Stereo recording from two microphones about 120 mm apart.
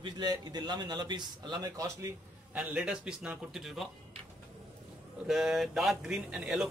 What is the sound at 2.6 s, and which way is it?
A man's voice, 10° right (ahead or behind).